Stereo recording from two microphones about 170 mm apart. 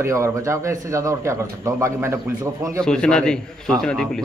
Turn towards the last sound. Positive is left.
turn(degrees=5)  # may be behind; listen again after turning